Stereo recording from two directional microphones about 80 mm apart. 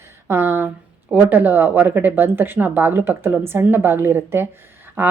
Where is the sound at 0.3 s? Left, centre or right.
Right.